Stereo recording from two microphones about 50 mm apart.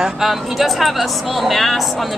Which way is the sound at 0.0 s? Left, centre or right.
Centre.